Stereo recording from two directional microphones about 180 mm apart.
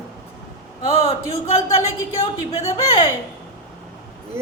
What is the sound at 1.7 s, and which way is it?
A woman's voice, 35° left (ahead or behind).